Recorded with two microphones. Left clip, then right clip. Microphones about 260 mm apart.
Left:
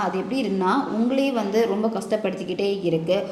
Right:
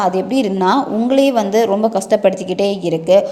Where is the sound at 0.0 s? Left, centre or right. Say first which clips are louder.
Right 9 dB; right.